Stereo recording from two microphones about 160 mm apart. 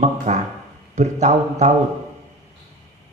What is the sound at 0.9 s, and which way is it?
Speech, 45° right (ahead or behind).